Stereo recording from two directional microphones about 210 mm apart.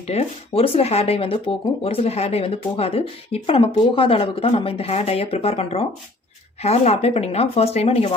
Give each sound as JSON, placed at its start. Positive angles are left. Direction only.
{"t": 0.1, "sound": "speech", "side_deg": 30}